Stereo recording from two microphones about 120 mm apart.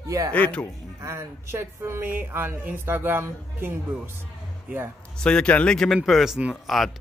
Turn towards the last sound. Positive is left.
turn(degrees=0)  # may be behind; listen again after turning